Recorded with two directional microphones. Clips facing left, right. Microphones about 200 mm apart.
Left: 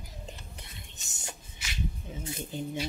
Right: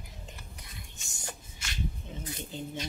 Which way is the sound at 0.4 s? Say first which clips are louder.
Left 1 dB; 25° left (ahead or behind).